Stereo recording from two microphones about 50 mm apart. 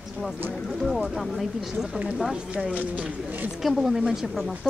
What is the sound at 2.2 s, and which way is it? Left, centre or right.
Speech, centre.